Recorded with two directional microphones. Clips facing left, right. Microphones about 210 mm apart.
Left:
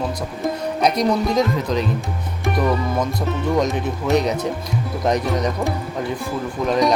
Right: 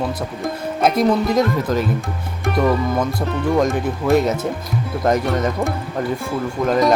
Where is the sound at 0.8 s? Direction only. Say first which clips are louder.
Right 2 dB; 5° right (ahead or behind).